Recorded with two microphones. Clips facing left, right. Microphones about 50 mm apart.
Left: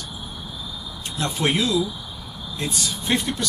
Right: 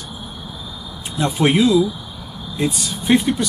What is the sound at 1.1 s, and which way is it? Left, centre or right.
Speech, centre.